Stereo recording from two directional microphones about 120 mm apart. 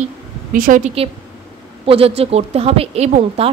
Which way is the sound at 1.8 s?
50° right (ahead or behind).